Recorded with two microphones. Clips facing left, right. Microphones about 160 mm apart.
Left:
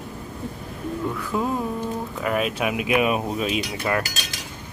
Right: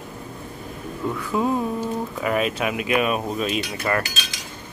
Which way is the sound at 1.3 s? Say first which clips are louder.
Right 3 dB; 5° right (ahead or behind).